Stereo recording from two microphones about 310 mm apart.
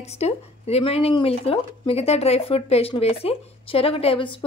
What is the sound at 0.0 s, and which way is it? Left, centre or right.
Speech, centre.